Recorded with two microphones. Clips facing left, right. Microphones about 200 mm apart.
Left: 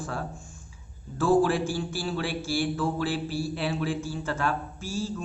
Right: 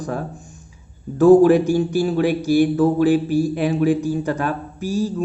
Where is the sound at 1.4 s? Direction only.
20° right (ahead or behind).